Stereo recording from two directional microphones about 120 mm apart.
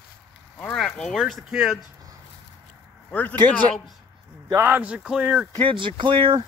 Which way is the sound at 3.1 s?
15° left (ahead or behind).